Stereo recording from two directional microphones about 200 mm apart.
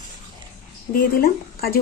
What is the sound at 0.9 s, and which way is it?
Speech, 50° left (ahead or behind).